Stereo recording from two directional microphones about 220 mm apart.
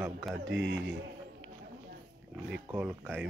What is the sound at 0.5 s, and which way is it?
Speech, 55° right (ahead or behind).